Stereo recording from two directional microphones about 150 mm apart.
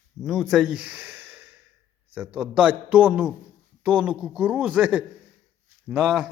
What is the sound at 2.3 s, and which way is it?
Speech, 10° right (ahead or behind).